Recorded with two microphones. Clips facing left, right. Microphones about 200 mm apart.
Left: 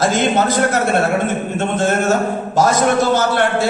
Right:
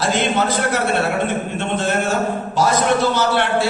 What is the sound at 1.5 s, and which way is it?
A man's voice, 45° left (ahead or behind).